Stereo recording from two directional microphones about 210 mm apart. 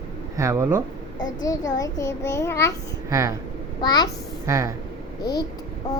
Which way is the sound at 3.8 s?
20° left (ahead or behind).